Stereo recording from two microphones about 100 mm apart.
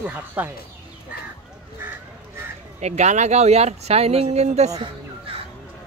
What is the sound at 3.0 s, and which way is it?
Speech, 90° right.